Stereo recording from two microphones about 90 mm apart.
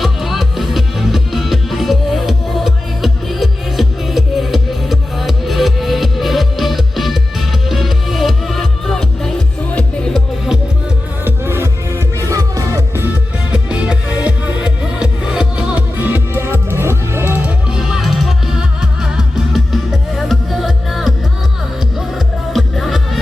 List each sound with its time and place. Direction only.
0.0 s music: centre (ahead or behind)
11.3 s music: 25° right (ahead or behind)
13.5 s music: 15° right (ahead or behind)
17.7 s music: 5° right (ahead or behind)